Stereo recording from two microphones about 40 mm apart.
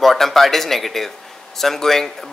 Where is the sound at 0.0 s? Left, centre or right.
Centre.